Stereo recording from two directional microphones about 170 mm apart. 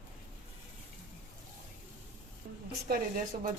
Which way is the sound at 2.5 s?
50° right (ahead or behind).